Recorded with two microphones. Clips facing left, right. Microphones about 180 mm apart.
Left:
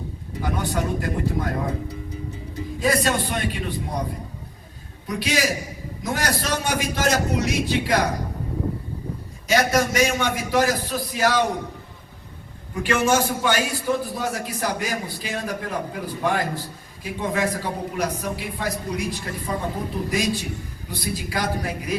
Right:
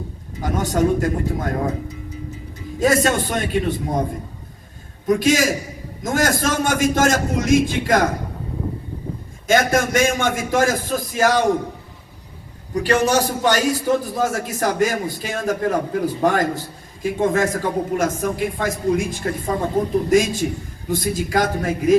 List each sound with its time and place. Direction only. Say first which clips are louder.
0.4 s a man's voice: right 7 dB; 45° right (ahead or behind)
2.7 s a man's voice: right 5 dB; 45° right (ahead or behind)
5.0 s a man's voice: right 7 dB; 45° right (ahead or behind)
9.5 s a man's voice: right 3 dB; 50° right (ahead or behind)
12.7 s a man's voice: right 3 dB; 40° right (ahead or behind)